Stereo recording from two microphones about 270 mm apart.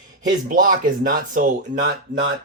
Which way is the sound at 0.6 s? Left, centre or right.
Right.